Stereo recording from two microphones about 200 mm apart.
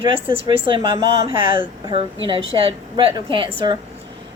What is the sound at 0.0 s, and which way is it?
A woman's voice, 25° right (ahead or behind).